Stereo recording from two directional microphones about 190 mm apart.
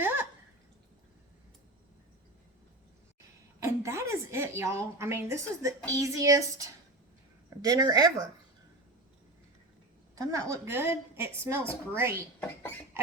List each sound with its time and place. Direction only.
0.0 s a sound: 10° right (ahead or behind)
3.2 s a woman's voice: 15° right (ahead or behind)
10.2 s a woman's voice: 15° right (ahead or behind)